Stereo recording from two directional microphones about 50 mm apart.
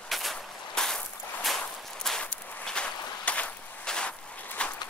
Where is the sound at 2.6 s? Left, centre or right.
Centre.